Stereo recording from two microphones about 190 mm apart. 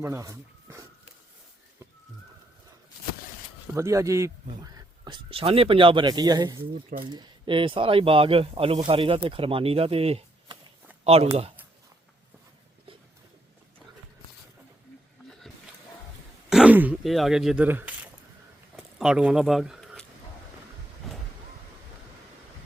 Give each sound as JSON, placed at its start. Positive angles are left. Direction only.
{"t": 0.0, "sound": "speech", "side_deg": -15}
{"t": 3.8, "sound": "speech", "side_deg": -15}
{"t": 16.5, "sound": "a sound", "side_deg": -5}